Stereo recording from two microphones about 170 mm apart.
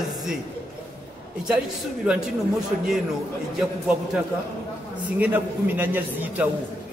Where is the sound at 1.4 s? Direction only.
5° right (ahead or behind).